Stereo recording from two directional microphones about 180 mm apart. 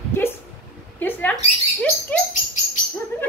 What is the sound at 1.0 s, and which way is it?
Bird, 10° left (ahead or behind).